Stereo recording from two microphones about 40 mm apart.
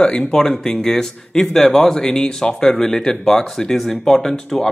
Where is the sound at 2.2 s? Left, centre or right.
Left.